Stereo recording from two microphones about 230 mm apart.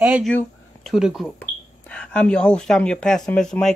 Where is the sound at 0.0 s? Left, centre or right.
Centre.